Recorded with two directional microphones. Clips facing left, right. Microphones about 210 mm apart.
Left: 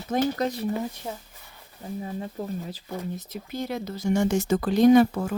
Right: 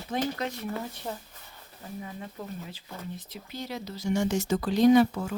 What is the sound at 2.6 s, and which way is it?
Speech, 40° left (ahead or behind).